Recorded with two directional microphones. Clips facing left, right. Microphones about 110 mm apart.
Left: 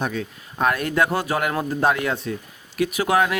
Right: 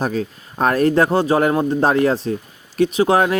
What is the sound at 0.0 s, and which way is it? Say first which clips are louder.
Speech: right 5 dB; 40° right (ahead or behind).